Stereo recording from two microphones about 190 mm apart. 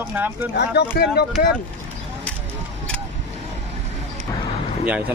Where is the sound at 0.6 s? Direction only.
60° left (ahead or behind).